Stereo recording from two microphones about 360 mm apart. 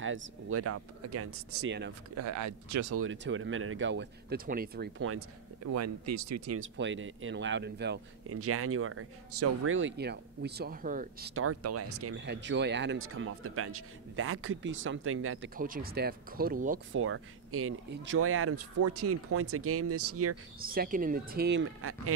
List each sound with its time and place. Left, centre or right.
0.0 s speech: right
2.1 s speech: right
16.9 s speech: right
20.5 s speech: right